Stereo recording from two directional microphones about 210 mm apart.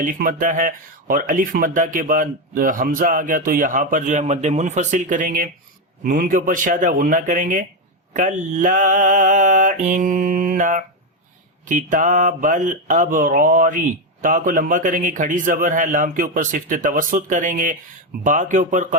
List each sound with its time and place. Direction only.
0.0 s speech: 40° right (ahead or behind)